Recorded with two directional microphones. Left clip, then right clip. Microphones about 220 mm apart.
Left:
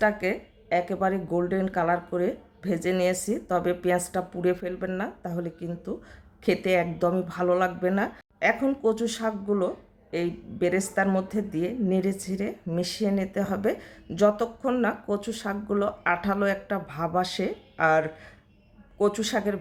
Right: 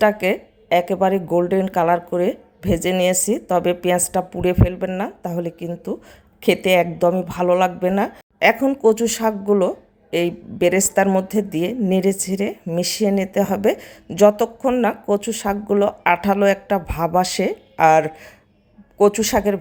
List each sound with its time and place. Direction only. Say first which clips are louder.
0.0 s speech: right 8 dB; 20° right (ahead or behind)